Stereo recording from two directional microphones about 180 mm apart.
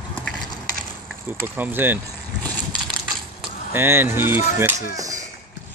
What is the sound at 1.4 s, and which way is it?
Speech, 10° right (ahead or behind).